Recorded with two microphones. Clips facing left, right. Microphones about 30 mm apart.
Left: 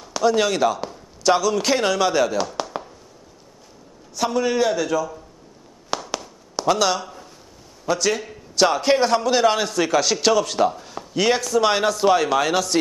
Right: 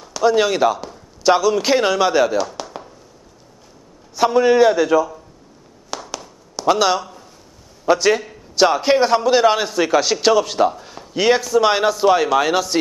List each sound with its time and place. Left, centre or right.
0.2 s a man's voice: centre
2.6 s chop: centre
4.2 s a man's voice: centre
5.9 s a sound: centre
6.6 s a man's voice: centre